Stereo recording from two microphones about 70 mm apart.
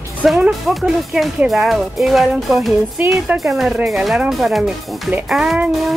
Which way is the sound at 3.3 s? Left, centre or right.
Centre.